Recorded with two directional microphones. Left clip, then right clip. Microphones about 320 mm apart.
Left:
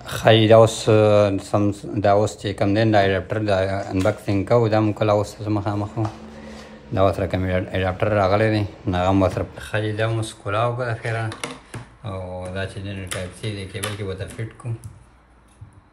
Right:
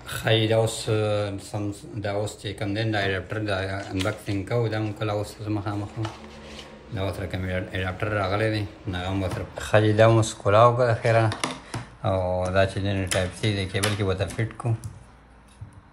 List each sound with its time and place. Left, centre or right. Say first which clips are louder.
0.0 s speech: left 8 dB; centre
7.0 s speech: left 11 dB; centre
9.6 s speech: right 10 dB; centre